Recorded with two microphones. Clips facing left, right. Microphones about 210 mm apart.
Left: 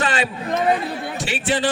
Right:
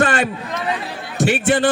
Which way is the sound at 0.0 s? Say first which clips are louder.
Right 4 dB; 50° right (ahead or behind).